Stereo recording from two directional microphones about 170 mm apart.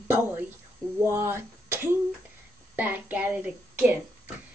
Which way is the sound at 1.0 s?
15° right (ahead or behind).